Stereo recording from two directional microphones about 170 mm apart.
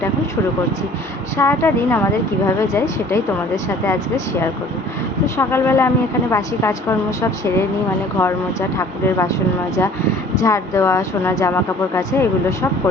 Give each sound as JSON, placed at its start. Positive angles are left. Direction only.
{"t": 1.4, "sound": "speech", "side_deg": 15}
{"t": 8.8, "sound": "speech", "side_deg": 20}
{"t": 10.4, "sound": "speech", "side_deg": 15}